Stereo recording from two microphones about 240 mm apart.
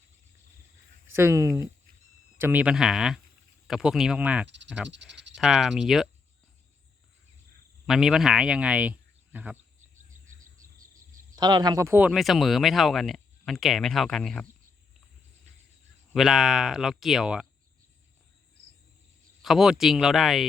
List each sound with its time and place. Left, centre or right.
1.1 s speech: centre
4.4 s speech: right
5.3 s speech: centre
7.9 s speech: centre
11.3 s speech: centre
16.1 s speech: centre
19.4 s speech: centre